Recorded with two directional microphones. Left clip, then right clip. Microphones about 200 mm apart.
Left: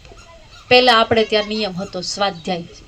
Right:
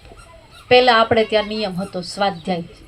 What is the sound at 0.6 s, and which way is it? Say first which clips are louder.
A woman's voice: even; 25° left (ahead or behind).